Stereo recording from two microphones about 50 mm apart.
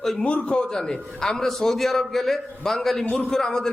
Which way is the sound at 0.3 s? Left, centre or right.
Left.